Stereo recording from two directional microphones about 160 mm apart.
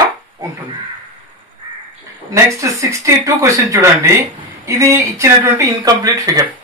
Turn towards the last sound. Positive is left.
turn(degrees=-20)  # may be behind; listen again after turning